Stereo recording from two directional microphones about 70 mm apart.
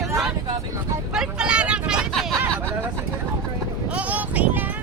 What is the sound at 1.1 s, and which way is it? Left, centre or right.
Vehicle, centre.